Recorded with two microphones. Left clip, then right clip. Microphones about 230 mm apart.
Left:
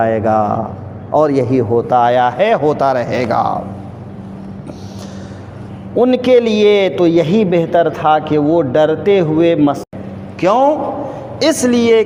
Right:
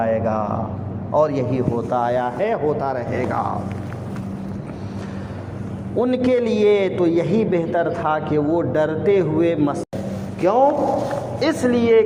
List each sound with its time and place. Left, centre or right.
0.0 s a man's voice: left
6.0 s a man's voice: left